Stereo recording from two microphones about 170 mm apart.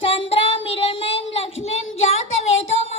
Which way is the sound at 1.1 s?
90° left.